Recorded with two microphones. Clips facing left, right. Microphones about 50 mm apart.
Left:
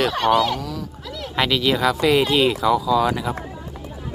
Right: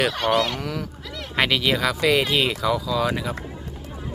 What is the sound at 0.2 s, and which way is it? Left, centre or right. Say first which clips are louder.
Speech: left 3 dB; centre.